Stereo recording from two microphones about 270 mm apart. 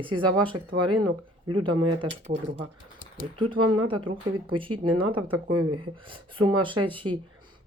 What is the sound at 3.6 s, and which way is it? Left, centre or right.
Speech, right.